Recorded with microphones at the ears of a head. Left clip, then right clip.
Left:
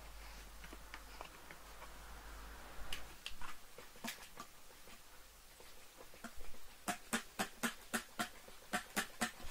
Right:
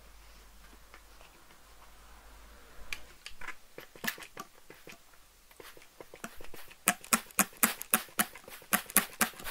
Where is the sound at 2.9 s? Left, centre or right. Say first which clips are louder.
Right 6 dB; right.